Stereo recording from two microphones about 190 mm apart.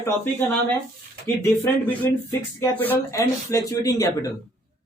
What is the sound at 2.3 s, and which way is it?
Speech, 10° left (ahead or behind).